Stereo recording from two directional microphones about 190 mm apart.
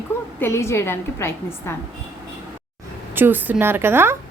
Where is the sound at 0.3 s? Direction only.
15° left (ahead or behind).